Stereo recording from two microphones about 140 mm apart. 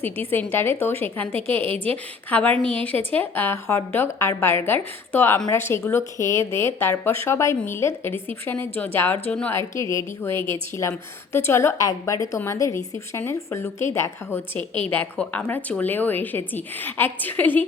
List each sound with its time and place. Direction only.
0.0 s a woman's voice: 15° left (ahead or behind)
1.3 s a woman's voice: 45° right (ahead or behind)
2.3 s a woman's voice: 10° left (ahead or behind)